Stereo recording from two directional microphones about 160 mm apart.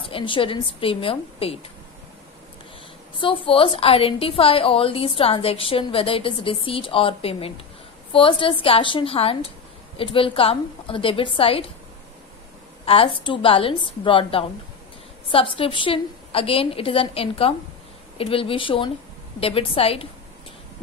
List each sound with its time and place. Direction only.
0.0 s a woman's voice: 35° left (ahead or behind)
3.2 s a woman's voice: 35° left (ahead or behind)
12.8 s a woman's voice: 35° left (ahead or behind)